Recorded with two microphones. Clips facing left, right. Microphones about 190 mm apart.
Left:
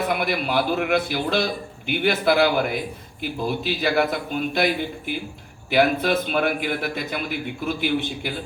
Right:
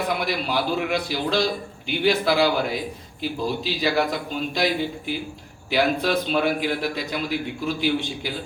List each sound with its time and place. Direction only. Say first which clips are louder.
0.1 s a man's voice: left 2 dB; 55° left (ahead or behind)